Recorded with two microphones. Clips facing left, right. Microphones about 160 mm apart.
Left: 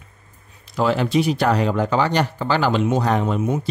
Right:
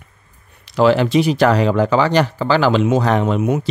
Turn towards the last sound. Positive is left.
turn(degrees=-85)